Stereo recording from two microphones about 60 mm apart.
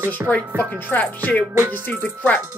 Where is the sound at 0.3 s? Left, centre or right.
Left.